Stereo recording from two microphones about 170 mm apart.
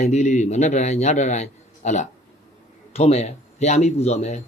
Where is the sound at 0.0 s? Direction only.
40° left (ahead or behind).